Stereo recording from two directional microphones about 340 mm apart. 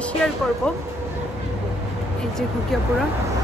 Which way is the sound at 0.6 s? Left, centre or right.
Centre.